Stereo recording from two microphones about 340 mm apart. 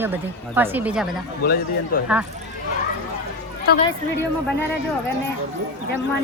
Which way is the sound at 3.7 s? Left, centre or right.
Left.